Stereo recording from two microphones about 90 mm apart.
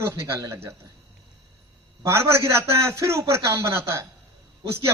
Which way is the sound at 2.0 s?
30° right (ahead or behind).